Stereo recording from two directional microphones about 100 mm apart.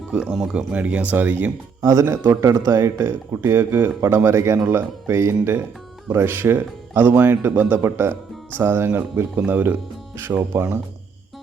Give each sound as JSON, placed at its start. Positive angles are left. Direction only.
{"t": 0.1, "sound": "speech", "side_deg": -10}
{"t": 1.8, "sound": "speech", "side_deg": -35}